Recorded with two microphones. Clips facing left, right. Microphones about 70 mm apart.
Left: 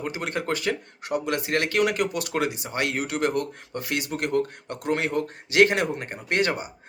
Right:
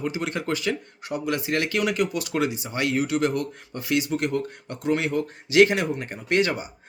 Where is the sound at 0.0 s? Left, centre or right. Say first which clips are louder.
Right 1 dB; left.